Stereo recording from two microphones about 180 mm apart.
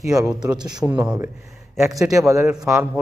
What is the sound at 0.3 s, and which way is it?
Speech, 25° right (ahead or behind).